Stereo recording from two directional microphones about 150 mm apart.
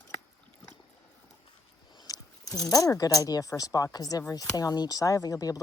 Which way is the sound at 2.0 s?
25° left (ahead or behind).